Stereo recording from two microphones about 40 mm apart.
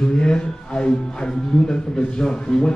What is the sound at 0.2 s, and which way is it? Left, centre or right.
Speech, left.